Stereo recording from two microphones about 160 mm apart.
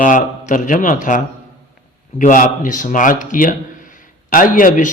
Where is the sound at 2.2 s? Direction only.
55° left (ahead or behind).